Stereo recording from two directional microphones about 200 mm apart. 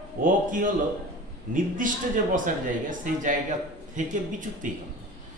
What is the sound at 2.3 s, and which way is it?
Speech, 40° right (ahead or behind).